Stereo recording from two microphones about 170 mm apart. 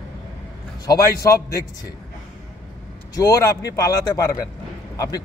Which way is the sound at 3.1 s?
20° left (ahead or behind).